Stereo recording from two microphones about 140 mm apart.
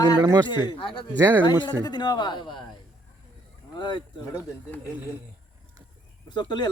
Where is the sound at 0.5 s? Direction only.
30° left (ahead or behind).